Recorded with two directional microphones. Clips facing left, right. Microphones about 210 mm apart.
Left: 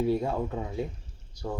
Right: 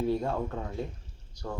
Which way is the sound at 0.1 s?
10° left (ahead or behind).